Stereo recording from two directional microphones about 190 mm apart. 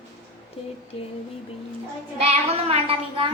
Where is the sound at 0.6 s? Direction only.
30° left (ahead or behind).